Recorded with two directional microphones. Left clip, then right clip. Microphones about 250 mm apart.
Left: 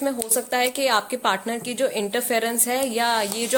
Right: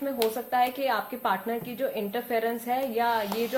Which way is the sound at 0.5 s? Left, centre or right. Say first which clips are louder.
Left 6 dB; left.